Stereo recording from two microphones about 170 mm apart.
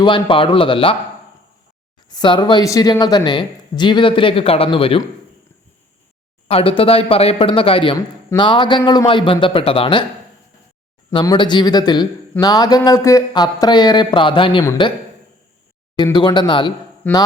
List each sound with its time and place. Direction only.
0.0 s speech: 30° left (ahead or behind)
2.0 s speech: 25° left (ahead or behind)
6.5 s speech: 35° left (ahead or behind)
11.1 s speech: 25° left (ahead or behind)
16.1 s speech: 25° left (ahead or behind)
17.0 s speech: 10° left (ahead or behind)